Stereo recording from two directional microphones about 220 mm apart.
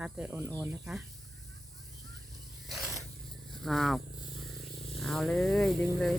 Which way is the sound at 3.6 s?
Centre (ahead or behind).